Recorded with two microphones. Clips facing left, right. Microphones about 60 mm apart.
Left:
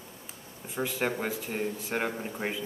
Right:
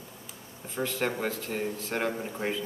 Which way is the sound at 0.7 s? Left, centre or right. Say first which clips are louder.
Even; centre.